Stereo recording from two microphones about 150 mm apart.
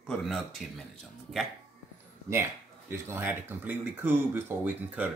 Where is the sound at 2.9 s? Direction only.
15° right (ahead or behind).